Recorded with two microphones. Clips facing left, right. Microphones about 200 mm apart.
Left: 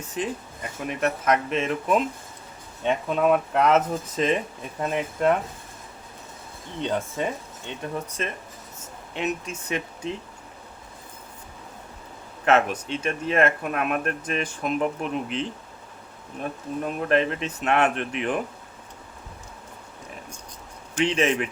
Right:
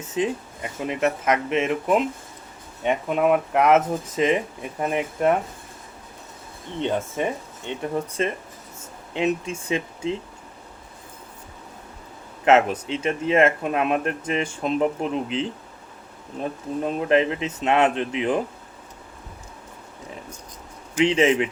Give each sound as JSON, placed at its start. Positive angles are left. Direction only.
{"t": 0.0, "sound": "speech", "side_deg": -25}
{"t": 6.8, "sound": "speech", "side_deg": -20}
{"t": 12.5, "sound": "speech", "side_deg": -25}
{"t": 16.4, "sound": "speech", "side_deg": -30}
{"t": 21.2, "sound": "speech", "side_deg": -25}